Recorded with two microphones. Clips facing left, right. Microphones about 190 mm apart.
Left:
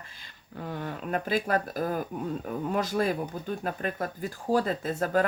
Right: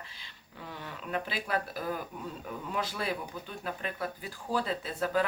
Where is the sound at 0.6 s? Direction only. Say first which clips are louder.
Left 8 dB; 50° left (ahead or behind).